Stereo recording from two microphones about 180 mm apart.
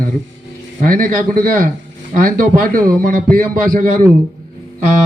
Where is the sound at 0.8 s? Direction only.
50° right (ahead or behind).